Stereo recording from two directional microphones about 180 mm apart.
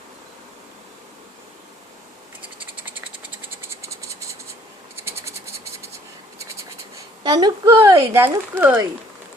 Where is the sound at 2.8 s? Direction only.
10° right (ahead or behind).